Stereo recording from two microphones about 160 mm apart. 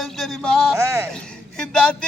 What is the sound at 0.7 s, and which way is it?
Speech, 15° right (ahead or behind).